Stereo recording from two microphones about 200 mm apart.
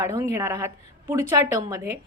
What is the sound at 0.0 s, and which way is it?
A woman's voice, 15° right (ahead or behind).